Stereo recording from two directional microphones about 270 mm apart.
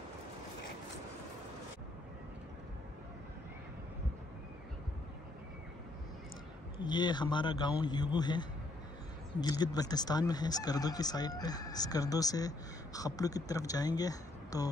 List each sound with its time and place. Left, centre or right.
6.8 s speech: centre